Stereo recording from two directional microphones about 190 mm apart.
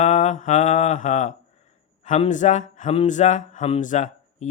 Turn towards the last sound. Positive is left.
turn(degrees=40)  # may be behind; listen again after turning